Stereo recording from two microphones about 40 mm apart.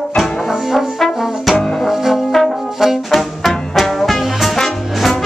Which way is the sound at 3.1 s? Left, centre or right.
Centre.